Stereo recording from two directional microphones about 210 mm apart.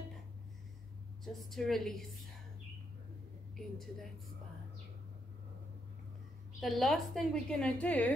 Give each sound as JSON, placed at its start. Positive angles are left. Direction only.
{"t": 1.2, "sound": "a woman's voice", "side_deg": 0}
{"t": 3.5, "sound": "a woman's voice", "side_deg": 0}
{"t": 6.6, "sound": "a woman's voice", "side_deg": 0}